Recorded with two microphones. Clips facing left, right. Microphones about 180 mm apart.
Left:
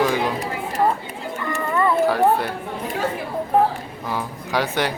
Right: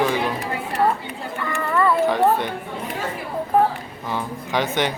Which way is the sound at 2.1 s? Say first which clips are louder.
Even; 5° left (ahead or behind).